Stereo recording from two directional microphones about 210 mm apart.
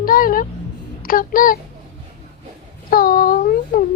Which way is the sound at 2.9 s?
45° left (ahead or behind).